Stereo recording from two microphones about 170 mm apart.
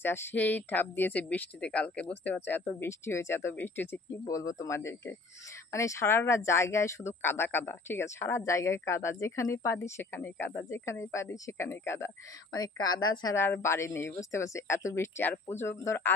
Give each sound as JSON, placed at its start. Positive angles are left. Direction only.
{"t": 0.0, "sound": "speech", "side_deg": 15}